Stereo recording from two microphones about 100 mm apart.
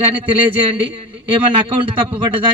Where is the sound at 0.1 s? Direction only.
60° right (ahead or behind).